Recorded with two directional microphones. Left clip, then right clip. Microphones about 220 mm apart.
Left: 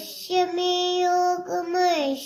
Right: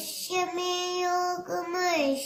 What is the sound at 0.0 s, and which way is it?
Child singing, 15° right (ahead or behind).